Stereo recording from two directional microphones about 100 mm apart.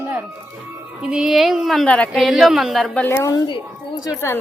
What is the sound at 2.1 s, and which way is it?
Speech, centre (ahead or behind).